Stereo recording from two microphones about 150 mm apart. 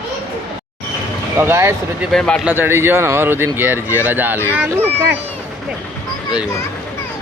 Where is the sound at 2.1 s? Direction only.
5° left (ahead or behind).